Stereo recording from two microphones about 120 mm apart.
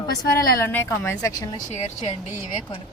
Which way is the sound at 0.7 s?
20° left (ahead or behind).